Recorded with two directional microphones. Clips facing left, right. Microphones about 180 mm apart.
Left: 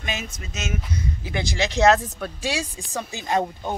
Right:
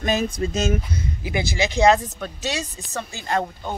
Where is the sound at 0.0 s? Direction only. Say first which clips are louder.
Right 10 dB; 35° right (ahead or behind).